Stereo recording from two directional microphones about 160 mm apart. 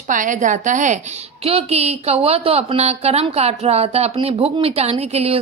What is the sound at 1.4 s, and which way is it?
A woman's voice, 40° right (ahead or behind).